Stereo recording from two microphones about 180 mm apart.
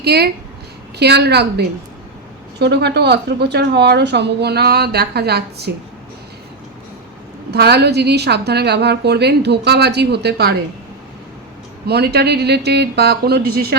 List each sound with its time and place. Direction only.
0.0 s a woman's voice: 60° right (ahead or behind)
7.5 s a woman's voice: 65° right (ahead or behind)
11.9 s a woman's voice: 65° right (ahead or behind)